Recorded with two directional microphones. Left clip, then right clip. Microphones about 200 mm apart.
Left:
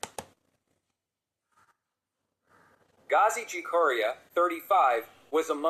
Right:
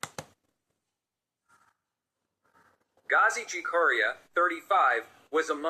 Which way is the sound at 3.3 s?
Centre (ahead or behind).